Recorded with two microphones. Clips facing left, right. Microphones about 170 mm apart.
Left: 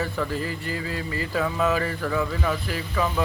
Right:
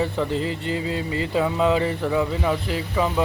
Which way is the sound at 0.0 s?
25° right (ahead or behind).